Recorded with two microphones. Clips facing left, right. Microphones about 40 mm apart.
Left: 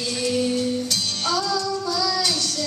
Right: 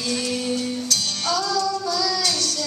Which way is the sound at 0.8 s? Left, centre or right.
Centre.